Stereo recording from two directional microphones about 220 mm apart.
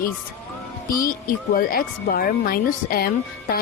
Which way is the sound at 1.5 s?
40° left (ahead or behind).